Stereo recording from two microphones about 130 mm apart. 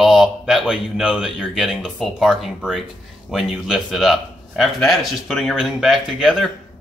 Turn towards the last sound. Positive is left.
turn(degrees=0)  # may be behind; listen again after turning